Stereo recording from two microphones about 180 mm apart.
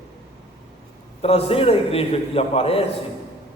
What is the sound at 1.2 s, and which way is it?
A man's voice, 35° left (ahead or behind).